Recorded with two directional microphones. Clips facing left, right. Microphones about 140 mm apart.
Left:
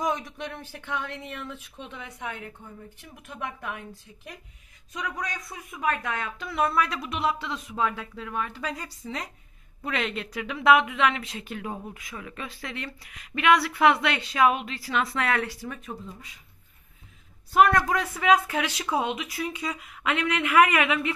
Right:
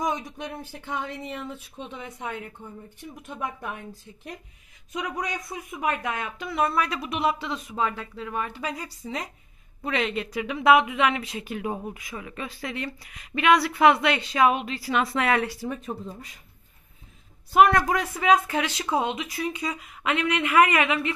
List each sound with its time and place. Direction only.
4.9 s a woman's voice: 15° right (ahead or behind)
15.6 s speech: 30° right (ahead or behind)
17.6 s a woman's voice: 10° right (ahead or behind)
18.3 s a woman's voice: 5° left (ahead or behind)